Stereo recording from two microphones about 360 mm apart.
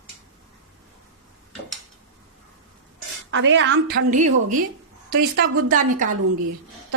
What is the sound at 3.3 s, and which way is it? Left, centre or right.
A woman's voice, right.